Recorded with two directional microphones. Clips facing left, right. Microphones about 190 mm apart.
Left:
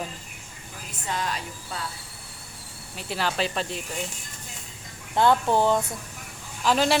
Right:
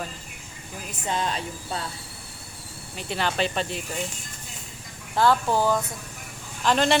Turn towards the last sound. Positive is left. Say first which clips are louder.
# right 1 dB
turn(degrees=5)  # may be behind; listen again after turning